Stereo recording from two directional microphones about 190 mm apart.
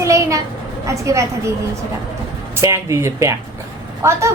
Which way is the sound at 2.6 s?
15° right (ahead or behind).